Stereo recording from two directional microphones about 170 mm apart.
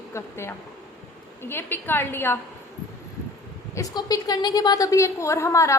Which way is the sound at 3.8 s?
20° left (ahead or behind).